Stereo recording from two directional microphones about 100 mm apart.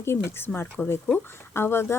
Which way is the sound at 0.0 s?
25° left (ahead or behind).